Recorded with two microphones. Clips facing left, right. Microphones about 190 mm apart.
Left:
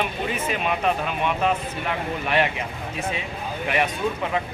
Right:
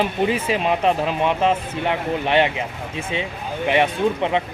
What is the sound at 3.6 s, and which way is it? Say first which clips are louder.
Speech: right 6 dB; 30° right (ahead or behind).